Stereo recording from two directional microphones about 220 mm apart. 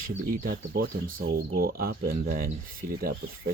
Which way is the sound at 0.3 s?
40° right (ahead or behind).